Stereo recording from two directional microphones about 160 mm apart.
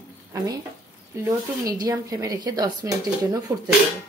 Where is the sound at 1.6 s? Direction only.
20° right (ahead or behind).